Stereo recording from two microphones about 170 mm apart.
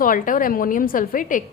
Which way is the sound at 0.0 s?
55° left (ahead or behind).